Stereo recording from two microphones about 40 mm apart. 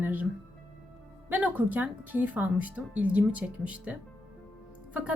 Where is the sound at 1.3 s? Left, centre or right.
Right.